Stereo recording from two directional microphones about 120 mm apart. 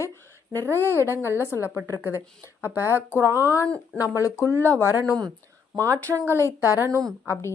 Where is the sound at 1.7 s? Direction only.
15° right (ahead or behind).